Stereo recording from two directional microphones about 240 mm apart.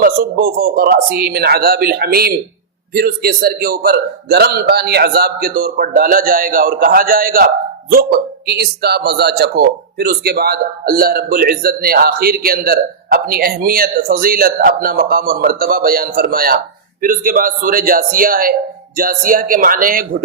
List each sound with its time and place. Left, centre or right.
0.0 s speech: right